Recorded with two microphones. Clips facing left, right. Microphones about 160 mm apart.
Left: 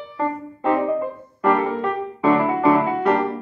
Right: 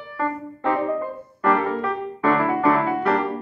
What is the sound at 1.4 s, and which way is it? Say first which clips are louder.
Music: left 2 dB; 10° left (ahead or behind).